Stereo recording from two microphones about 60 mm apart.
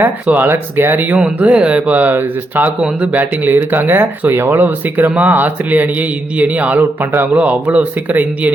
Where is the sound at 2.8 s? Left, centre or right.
Right.